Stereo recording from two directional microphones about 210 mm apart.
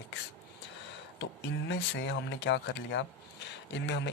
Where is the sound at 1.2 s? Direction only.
60° left (ahead or behind).